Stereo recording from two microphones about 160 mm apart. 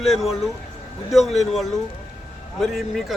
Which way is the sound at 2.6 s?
Centre (ahead or behind).